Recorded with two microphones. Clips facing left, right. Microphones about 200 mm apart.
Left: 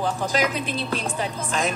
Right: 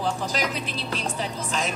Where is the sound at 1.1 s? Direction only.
50° left (ahead or behind).